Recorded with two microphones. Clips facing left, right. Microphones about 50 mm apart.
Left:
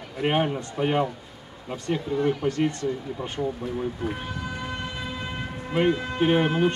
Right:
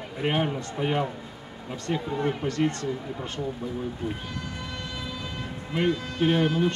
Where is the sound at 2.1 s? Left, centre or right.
Centre.